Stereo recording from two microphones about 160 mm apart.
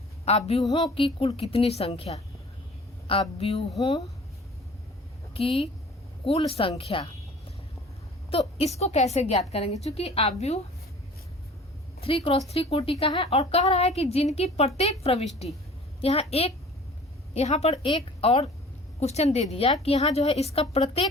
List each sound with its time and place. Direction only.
0.3 s a woman's voice: 40° left (ahead or behind)
0.6 s a woman's voice: 25° left (ahead or behind)
5.3 s a woman's voice: 35° left (ahead or behind)
8.3 s a woman's voice: 40° left (ahead or behind)
11.9 s a woman's voice: 35° left (ahead or behind)